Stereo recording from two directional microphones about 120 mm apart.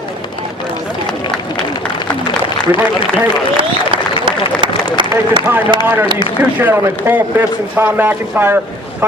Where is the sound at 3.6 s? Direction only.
45° right (ahead or behind).